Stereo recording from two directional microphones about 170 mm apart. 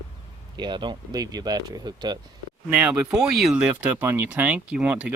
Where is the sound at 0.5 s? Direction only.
25° right (ahead or behind).